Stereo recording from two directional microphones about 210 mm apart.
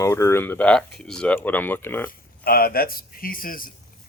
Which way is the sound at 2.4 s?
45° left (ahead or behind).